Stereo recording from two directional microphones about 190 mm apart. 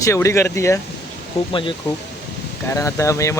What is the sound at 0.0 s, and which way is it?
Speech, 15° left (ahead or behind).